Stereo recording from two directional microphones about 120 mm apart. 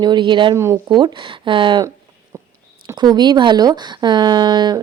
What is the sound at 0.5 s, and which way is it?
Speech, 20° right (ahead or behind).